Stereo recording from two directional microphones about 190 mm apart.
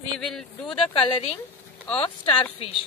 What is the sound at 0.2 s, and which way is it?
Speech, 5° left (ahead or behind).